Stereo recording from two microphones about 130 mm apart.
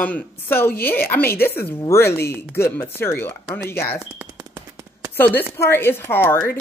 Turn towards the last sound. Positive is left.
turn(degrees=15)  # may be behind; listen again after turning